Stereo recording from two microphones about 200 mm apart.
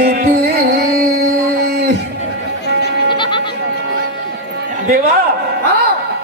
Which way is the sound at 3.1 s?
25° left (ahead or behind).